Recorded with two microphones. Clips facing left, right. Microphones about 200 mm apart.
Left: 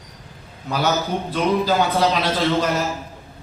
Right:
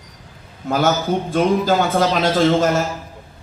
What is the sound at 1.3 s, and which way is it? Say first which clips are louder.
A man's voice: right 2 dB; 45° right (ahead or behind).